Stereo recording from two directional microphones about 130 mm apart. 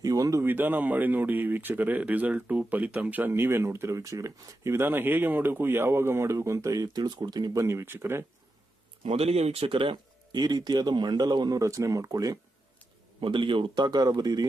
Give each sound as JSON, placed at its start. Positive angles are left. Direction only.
{"t": 0.0, "sound": "speech", "side_deg": -25}
{"t": 9.1, "sound": "speech", "side_deg": -50}
{"t": 13.1, "sound": "speech", "side_deg": -40}